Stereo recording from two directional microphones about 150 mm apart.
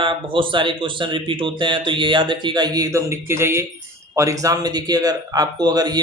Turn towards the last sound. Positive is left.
turn(degrees=-25)  # may be behind; listen again after turning